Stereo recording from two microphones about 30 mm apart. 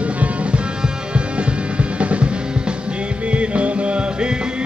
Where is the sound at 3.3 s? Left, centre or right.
Right.